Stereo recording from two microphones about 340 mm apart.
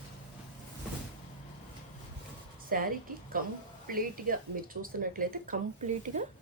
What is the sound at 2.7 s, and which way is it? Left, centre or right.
A woman's voice, right.